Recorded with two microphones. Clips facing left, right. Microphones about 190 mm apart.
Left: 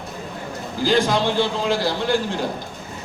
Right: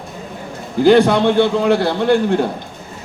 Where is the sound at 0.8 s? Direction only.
60° right (ahead or behind).